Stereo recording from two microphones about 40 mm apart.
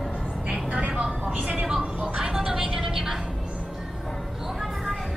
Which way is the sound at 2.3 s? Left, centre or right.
Centre.